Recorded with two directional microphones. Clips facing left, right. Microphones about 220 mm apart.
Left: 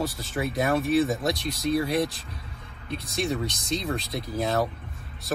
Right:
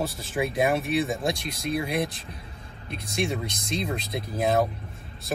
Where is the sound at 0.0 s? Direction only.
25° right (ahead or behind).